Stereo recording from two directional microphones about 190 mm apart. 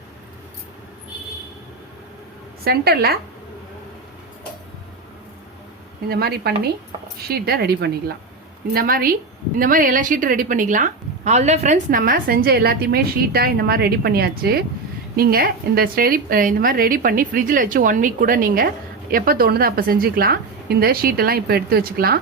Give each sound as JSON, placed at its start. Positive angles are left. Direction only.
{"t": 2.6, "sound": "a woman's voice", "side_deg": -55}
{"t": 6.1, "sound": "a woman's voice", "side_deg": -55}